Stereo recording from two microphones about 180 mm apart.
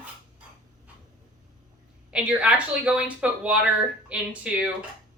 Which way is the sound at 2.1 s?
5° right (ahead or behind).